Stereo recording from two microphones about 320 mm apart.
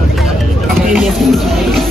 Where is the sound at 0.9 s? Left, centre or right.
Centre.